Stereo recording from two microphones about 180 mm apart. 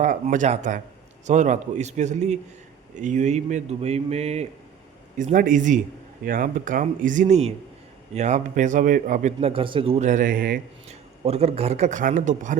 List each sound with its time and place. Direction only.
0.0 s a man's voice: 45° right (ahead or behind)
10.8 s a man's voice: 35° right (ahead or behind)